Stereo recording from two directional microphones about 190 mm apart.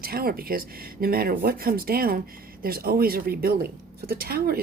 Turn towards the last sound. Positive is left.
turn(degrees=-55)  # may be behind; listen again after turning